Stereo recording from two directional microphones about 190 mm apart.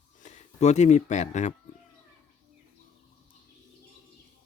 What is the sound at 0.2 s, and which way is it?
Speech, 35° left (ahead or behind).